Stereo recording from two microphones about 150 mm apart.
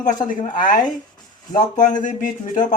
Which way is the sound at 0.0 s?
60° left (ahead or behind).